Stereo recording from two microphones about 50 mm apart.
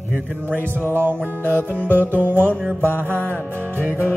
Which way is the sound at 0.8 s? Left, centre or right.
Right.